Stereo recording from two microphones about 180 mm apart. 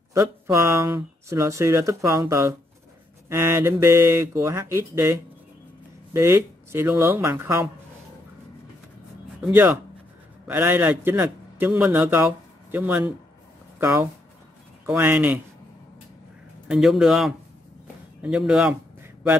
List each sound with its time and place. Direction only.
0.1 s speech: 15° right (ahead or behind)
9.4 s speech: 10° right (ahead or behind)
16.6 s a man's voice: centre (ahead or behind)